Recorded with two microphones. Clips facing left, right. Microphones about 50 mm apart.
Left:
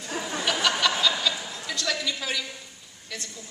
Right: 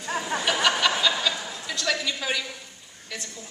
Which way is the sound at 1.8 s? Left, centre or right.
Centre.